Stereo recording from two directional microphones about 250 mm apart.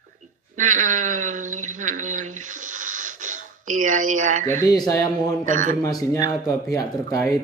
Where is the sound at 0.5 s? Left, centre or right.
Right.